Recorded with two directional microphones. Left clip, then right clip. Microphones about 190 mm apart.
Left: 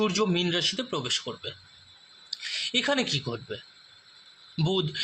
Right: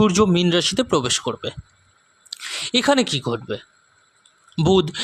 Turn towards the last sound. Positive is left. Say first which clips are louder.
# right 10 dB
turn(degrees=-55)  # may be behind; listen again after turning